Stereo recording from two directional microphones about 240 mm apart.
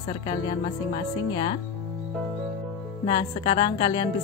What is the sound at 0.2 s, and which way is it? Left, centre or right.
Speech, centre.